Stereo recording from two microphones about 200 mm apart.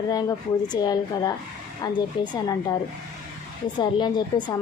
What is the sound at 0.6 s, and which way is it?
A woman's voice, 20° left (ahead or behind).